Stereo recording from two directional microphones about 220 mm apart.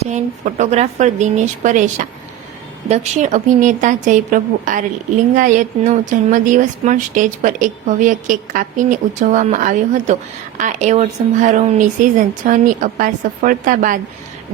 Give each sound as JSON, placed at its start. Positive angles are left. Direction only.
{"t": 0.1, "sound": "a woman's voice", "side_deg": -35}